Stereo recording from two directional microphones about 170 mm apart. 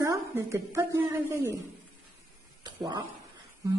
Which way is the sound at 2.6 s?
25° right (ahead or behind).